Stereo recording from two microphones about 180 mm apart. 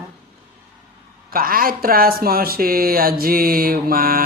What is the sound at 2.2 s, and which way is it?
Mantra, 55° right (ahead or behind).